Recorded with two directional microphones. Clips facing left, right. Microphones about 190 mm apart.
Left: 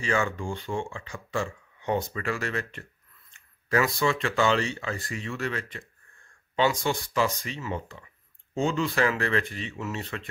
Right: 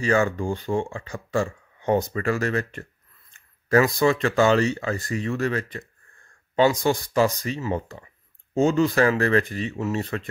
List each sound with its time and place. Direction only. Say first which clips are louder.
0.0 s speech: right 6 dB; 40° right (ahead or behind)